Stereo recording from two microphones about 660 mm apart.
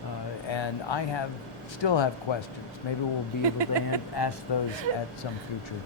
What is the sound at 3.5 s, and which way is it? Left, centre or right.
Speech, right.